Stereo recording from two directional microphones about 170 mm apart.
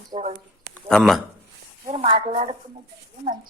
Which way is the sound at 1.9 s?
35° right (ahead or behind).